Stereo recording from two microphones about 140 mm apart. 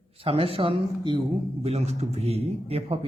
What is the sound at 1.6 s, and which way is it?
A man's voice, 50° right (ahead or behind).